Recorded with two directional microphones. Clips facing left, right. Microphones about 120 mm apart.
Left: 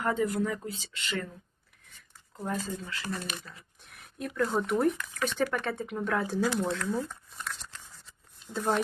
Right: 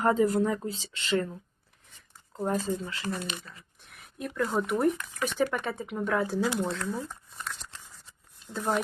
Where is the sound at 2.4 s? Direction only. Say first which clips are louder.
Right 5 dB; 30° right (ahead or behind).